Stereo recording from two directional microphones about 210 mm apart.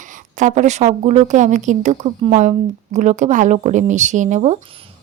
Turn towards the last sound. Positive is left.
turn(degrees=-35)  # may be behind; listen again after turning